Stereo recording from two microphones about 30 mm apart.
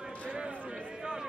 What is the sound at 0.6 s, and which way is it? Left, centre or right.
Run, right.